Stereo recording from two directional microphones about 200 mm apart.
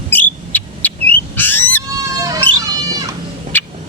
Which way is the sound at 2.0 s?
15° right (ahead or behind).